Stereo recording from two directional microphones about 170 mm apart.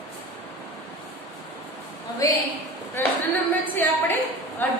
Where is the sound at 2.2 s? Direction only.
20° left (ahead or behind).